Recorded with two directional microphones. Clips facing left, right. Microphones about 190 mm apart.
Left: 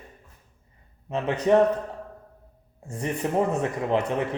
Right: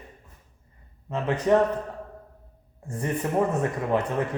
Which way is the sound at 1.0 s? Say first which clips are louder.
Left 1 dB; 20° left (ahead or behind).